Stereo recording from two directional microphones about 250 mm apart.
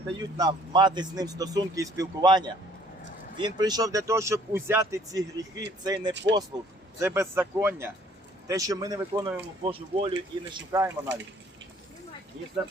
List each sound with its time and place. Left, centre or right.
0.3 s speech: centre
10.7 s speech: centre